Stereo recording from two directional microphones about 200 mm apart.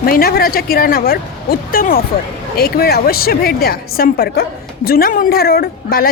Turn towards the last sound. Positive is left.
turn(degrees=50)  # may be behind; listen again after turning